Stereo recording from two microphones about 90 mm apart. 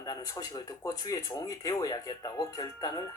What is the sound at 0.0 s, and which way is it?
Speech, 45° left (ahead or behind).